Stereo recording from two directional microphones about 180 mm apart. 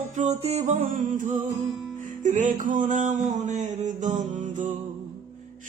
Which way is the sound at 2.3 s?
45° right (ahead or behind).